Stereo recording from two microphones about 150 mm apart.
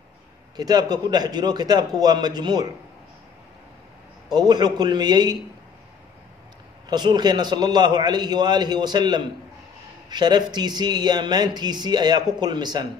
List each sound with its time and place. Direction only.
0.6 s speech: 25° right (ahead or behind)
4.3 s speech: 25° right (ahead or behind)
6.9 s speech: 30° right (ahead or behind)